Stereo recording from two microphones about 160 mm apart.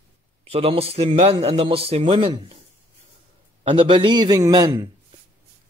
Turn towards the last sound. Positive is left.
turn(degrees=-25)  # may be behind; listen again after turning